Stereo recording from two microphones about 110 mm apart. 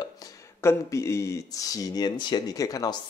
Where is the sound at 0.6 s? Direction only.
25° left (ahead or behind).